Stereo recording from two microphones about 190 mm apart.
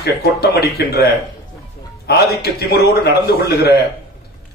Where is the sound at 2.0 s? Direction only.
55° left (ahead or behind).